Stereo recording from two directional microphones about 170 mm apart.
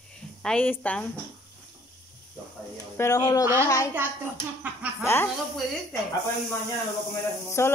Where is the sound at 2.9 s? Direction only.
20° left (ahead or behind).